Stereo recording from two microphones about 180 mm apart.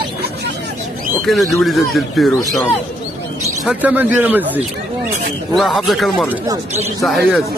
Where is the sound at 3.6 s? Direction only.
10° right (ahead or behind).